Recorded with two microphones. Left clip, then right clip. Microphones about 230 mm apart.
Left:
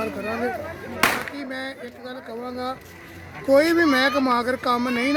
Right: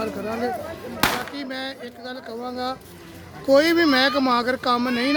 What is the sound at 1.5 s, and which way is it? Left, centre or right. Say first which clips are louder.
Speech: right 1 dB; centre.